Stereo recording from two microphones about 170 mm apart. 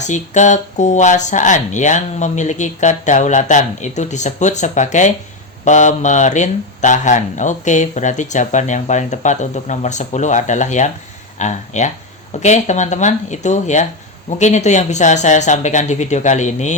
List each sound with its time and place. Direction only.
0.1 s speech: 45° left (ahead or behind)